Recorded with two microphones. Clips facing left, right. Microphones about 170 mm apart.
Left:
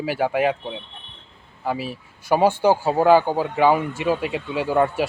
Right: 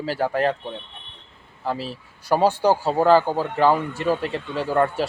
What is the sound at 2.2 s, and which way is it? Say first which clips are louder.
Speech: left 1 dB; 20° left (ahead or behind).